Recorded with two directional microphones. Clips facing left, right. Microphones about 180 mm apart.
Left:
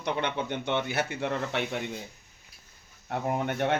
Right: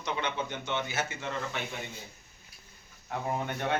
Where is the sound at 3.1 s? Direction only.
65° left (ahead or behind).